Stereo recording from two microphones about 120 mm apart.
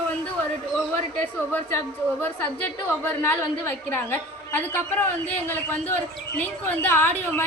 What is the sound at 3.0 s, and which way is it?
A woman's voice, 15° left (ahead or behind).